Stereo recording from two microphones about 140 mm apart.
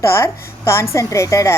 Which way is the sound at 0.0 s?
20° left (ahead or behind).